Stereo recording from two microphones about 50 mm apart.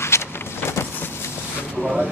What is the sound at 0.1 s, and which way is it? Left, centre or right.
Vehicle, left.